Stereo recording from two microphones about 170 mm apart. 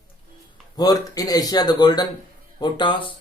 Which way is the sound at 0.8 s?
20° left (ahead or behind).